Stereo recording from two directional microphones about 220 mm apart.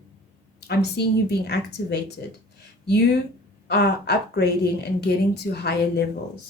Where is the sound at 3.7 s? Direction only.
50° left (ahead or behind).